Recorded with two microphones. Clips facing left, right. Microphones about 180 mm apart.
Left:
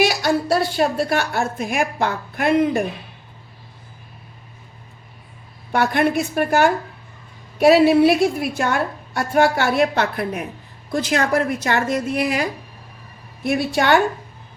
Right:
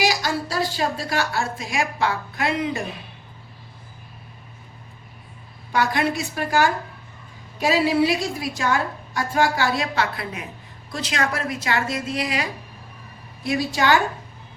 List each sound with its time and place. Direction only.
0.0 s a woman's voice: 60° left (ahead or behind)
5.7 s a woman's voice: 55° left (ahead or behind)